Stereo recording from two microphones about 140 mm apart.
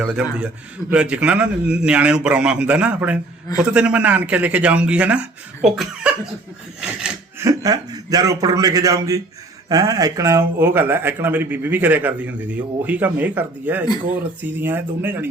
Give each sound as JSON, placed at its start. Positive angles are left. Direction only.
{"t": 0.0, "sound": "speech", "side_deg": -10}
{"t": 7.3, "sound": "a man's voice", "side_deg": -25}